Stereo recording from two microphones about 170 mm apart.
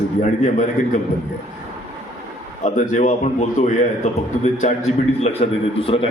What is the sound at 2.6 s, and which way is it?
A man's voice, 45° left (ahead or behind).